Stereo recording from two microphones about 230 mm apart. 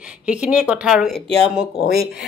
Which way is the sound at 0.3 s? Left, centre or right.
Centre.